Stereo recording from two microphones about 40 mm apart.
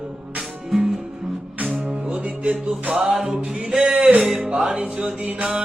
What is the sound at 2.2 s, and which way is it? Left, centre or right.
Music, right.